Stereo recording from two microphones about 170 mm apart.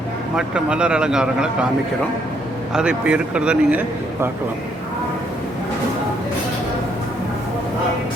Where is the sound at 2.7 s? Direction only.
5° right (ahead or behind).